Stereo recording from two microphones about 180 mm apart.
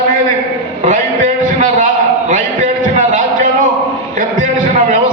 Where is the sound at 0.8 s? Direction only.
45° right (ahead or behind).